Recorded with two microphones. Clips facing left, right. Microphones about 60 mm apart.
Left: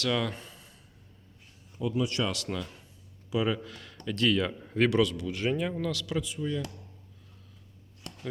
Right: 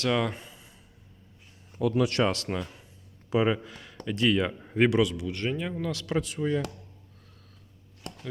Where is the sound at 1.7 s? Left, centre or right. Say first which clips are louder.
Right 5 dB; right.